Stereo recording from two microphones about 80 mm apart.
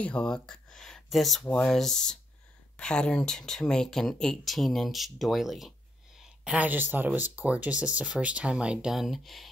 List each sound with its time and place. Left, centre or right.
0.0 s speech: centre
6.1 s speech: centre